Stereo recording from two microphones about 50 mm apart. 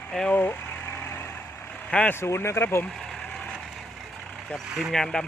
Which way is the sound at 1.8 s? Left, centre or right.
Left.